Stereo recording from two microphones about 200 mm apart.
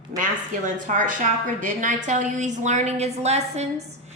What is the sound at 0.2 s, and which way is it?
A woman's voice, 40° right (ahead or behind).